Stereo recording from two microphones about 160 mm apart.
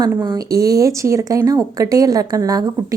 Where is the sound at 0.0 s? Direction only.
25° right (ahead or behind).